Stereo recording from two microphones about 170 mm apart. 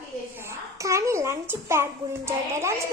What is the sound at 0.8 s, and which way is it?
A child's voice, 15° right (ahead or behind).